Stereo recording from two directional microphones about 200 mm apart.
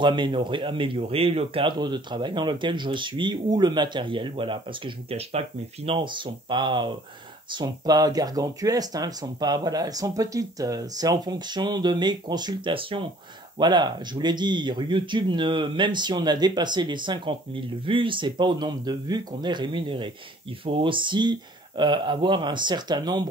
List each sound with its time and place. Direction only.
0.0 s speech: 25° right (ahead or behind)